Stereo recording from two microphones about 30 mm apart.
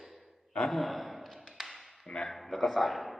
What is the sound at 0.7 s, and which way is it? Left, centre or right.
Speech, centre.